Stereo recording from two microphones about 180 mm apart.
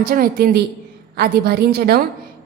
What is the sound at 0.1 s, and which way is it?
A woman's voice, 55° right (ahead or behind).